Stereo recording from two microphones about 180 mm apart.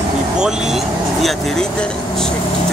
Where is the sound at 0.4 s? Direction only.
5° right (ahead or behind).